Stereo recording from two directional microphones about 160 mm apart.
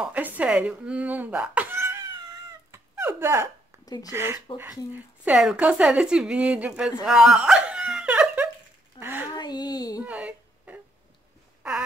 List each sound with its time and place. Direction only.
0.0 s speech: 10° right (ahead or behind)
2.7 s dog: 15° right (ahead or behind)
3.8 s speech: 25° left (ahead or behind)
4.1 s speech: 15° right (ahead or behind)
5.2 s speech: 5° right (ahead or behind)
7.1 s dog: 5° right (ahead or behind)
9.0 s a sound: 10° right (ahead or behind)
9.3 s speech: 25° left (ahead or behind)
10.0 s a sound: 10° right (ahead or behind)